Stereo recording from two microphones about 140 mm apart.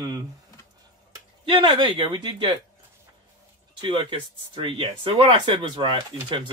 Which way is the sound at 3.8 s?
35° right (ahead or behind).